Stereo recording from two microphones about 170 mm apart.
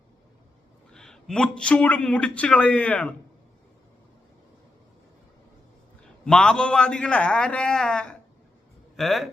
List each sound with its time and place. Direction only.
0.9 s a man's voice: 5° left (ahead or behind)
6.2 s a man's voice: 5° left (ahead or behind)